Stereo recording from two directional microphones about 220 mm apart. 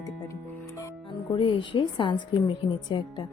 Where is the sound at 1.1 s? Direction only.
20° left (ahead or behind).